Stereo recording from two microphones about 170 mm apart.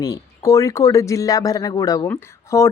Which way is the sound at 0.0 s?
20° left (ahead or behind).